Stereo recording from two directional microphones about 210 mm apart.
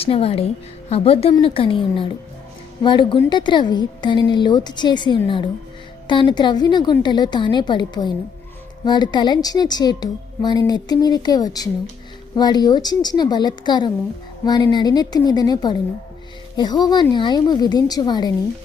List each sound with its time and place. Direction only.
0.0 s speech: 25° left (ahead or behind)